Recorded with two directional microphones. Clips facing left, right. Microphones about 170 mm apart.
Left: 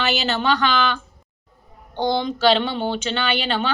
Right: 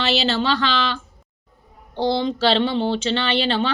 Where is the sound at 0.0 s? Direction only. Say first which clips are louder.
Right 1 dB; 30° right (ahead or behind).